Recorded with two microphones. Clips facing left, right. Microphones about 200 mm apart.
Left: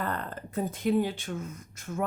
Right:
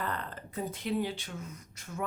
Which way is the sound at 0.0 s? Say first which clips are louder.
Left 4 dB; 45° left (ahead or behind).